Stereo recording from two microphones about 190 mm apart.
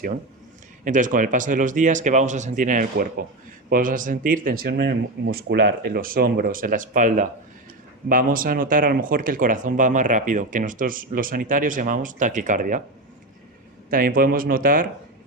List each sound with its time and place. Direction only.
0.9 s speech: 40° right (ahead or behind)
13.9 s speech: 50° right (ahead or behind)